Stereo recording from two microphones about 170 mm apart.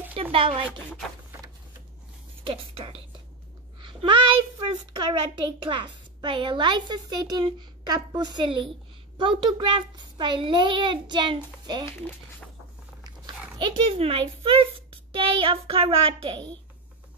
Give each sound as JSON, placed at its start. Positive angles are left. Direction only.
{"t": 0.1, "sound": "a child's voice", "side_deg": -35}
{"t": 2.4, "sound": "a child's voice", "side_deg": -30}
{"t": 13.6, "sound": "a child's voice", "side_deg": -30}